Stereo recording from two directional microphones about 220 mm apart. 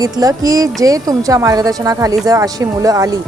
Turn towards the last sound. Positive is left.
turn(degrees=-15)  # may be behind; listen again after turning